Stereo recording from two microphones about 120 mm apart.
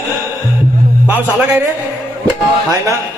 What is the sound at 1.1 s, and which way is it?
Speech, 15° right (ahead or behind).